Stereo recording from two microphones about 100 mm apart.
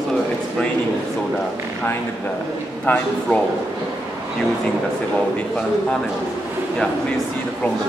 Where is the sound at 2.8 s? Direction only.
10° left (ahead or behind).